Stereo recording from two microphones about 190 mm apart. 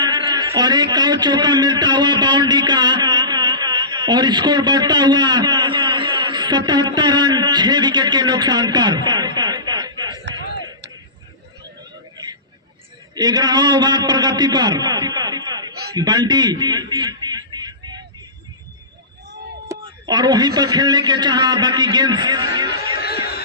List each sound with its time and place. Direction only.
0.0 s a man's voice: 25° right (ahead or behind)
12.1 s vehicle: 20° right (ahead or behind)
13.1 s a man's voice: 20° right (ahead or behind)
15.9 s a sound: 20° right (ahead or behind)
19.8 s a man's voice: 20° right (ahead or behind)
23.0 s a sound: 55° left (ahead or behind)